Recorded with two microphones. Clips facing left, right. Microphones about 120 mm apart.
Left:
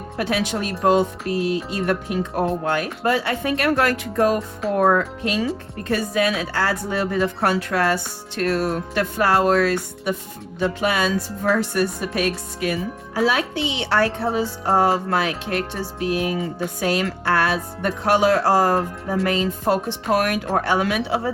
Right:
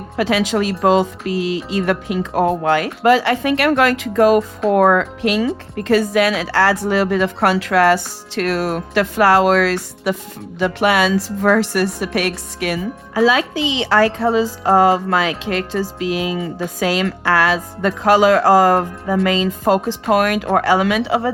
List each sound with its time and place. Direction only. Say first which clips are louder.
0.2 s a woman's voice: right 6 dB; 90° right